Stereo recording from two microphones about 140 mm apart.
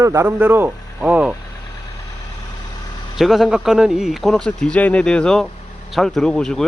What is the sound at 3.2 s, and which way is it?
Speech, centre (ahead or behind).